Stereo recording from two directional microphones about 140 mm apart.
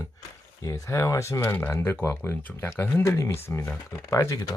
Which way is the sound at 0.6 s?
25° left (ahead or behind).